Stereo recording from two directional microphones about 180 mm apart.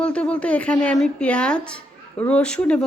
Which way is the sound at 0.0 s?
5° left (ahead or behind).